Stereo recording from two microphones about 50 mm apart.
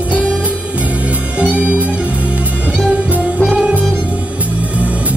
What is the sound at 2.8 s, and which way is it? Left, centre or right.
Music, right.